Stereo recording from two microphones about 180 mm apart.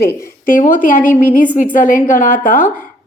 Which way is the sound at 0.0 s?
50° left (ahead or behind).